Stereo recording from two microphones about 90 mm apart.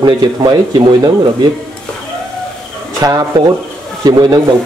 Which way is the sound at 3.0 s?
45° right (ahead or behind).